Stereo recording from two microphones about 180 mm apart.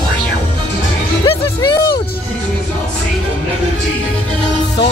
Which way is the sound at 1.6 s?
20° left (ahead or behind).